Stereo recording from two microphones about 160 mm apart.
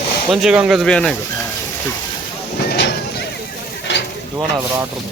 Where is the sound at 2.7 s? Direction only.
90° left.